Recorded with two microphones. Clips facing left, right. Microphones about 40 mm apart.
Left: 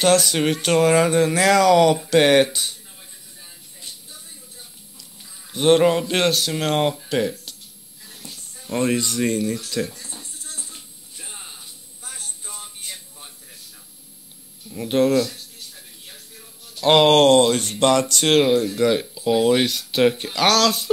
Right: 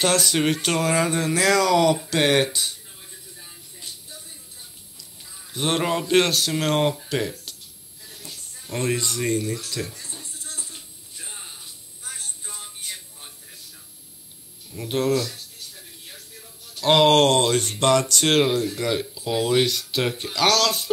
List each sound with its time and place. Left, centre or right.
0.0 s speech: left
5.5 s speech: centre
8.6 s speech: left
10.2 s music: right
10.6 s a sound: left
14.7 s speech: left
16.7 s speech: left
19.7 s speech: left